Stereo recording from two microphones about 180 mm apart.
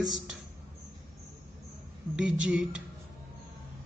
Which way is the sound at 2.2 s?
5° right (ahead or behind).